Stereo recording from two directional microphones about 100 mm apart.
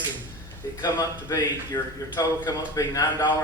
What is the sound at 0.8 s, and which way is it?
A man's voice, 45° left (ahead or behind).